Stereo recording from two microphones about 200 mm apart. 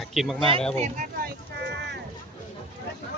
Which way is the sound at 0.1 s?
Centre (ahead or behind).